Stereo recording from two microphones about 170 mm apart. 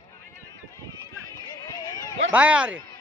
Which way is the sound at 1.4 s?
20° left (ahead or behind).